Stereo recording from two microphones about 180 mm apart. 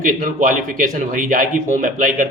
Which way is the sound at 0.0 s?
45° right (ahead or behind).